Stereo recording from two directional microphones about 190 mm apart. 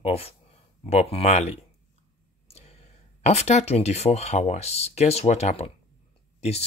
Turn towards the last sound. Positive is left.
turn(degrees=35)  # may be behind; listen again after turning